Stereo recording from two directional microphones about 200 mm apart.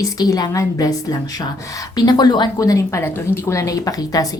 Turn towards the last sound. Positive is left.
turn(degrees=15)  # may be behind; listen again after turning